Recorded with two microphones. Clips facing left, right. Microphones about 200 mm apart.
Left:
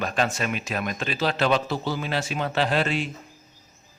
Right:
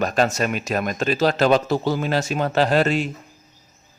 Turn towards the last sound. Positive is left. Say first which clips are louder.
# right 6 dB
turn(degrees=-45)  # may be behind; listen again after turning